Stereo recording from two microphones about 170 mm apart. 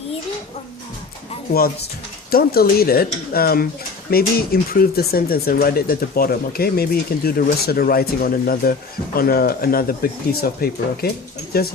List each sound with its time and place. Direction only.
2.3 s speech: 65° left (ahead or behind)